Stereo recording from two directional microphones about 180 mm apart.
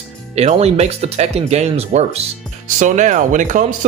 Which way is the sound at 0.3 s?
35° right (ahead or behind).